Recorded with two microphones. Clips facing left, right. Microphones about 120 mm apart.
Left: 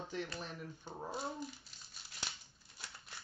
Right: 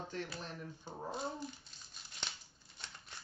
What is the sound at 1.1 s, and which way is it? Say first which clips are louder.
Speech: right 1 dB; 5° left (ahead or behind).